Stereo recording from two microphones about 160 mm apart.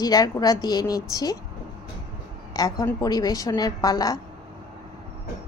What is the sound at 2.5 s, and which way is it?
Speech, 20° left (ahead or behind).